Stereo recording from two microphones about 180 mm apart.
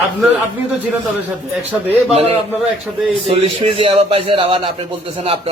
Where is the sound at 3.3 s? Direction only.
30° right (ahead or behind).